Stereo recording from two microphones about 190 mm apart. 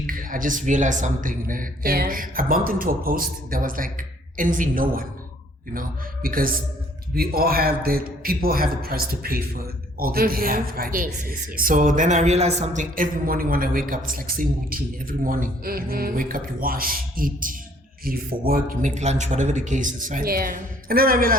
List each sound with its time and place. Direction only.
0.1 s speech: 45° right (ahead or behind)
6.2 s speech: 50° right (ahead or behind)